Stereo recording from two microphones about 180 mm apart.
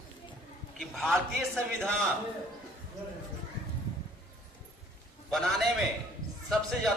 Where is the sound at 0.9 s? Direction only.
Centre (ahead or behind).